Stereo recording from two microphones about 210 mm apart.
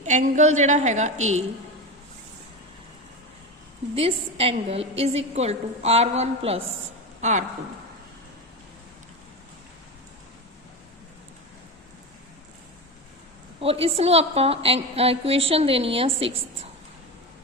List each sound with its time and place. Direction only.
0.0 s a woman's voice: 35° right (ahead or behind)
3.9 s a woman's voice: 30° right (ahead or behind)
13.6 s a woman's voice: 25° right (ahead or behind)